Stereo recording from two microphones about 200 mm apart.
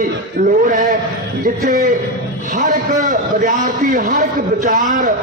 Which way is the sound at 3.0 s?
40° right (ahead or behind).